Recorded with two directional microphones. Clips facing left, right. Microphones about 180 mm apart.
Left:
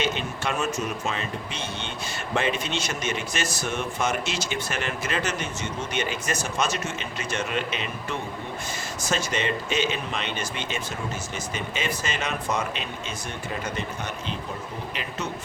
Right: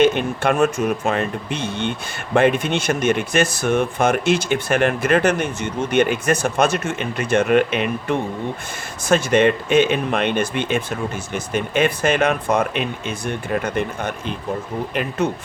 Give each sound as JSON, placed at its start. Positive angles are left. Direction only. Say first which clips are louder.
{"t": 0.0, "sound": "speech", "louder": "right 11 dB", "side_deg": -55}